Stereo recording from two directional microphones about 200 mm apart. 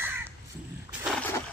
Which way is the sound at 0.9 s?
Centre (ahead or behind).